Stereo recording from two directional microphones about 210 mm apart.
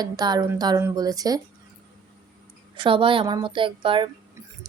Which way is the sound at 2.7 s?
25° right (ahead or behind).